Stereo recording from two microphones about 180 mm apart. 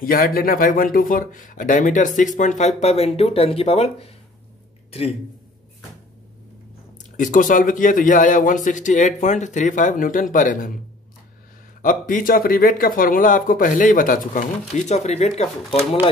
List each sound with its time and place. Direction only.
0.0 s speech: 55° left (ahead or behind); by 4.1 s 35° left (ahead or behind)
7.0 s speech: 45° left (ahead or behind)
11.8 s speech: 45° left (ahead or behind)
14.9 s speech: 40° left (ahead or behind)